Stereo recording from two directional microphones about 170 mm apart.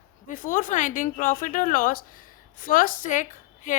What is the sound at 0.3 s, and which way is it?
A woman's voice, 50° left (ahead or behind).